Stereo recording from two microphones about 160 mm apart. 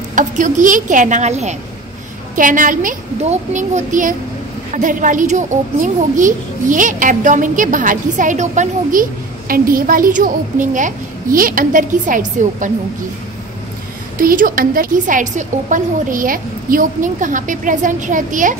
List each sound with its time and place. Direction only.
0.1 s a woman's voice: 50° right (ahead or behind)
2.3 s a woman's voice: 55° right (ahead or behind)
9.5 s a woman's voice: 60° right (ahead or behind)
14.2 s a woman's voice: 60° right (ahead or behind)